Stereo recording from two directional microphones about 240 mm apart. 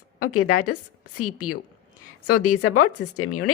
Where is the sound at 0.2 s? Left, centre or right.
Left.